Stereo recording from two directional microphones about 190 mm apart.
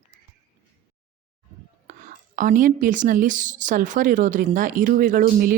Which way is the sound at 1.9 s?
45° right (ahead or behind).